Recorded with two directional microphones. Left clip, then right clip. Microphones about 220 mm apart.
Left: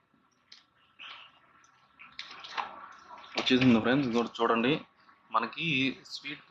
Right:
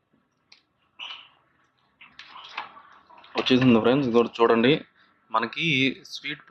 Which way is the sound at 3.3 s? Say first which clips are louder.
Right 5 dB; 25° right (ahead or behind).